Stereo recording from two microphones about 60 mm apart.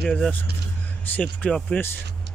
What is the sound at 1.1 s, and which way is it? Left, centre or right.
Speech, left.